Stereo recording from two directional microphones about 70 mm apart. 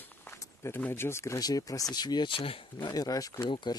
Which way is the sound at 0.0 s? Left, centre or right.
Left.